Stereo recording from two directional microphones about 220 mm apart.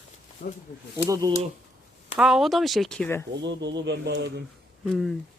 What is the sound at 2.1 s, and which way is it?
Speech, centre (ahead or behind).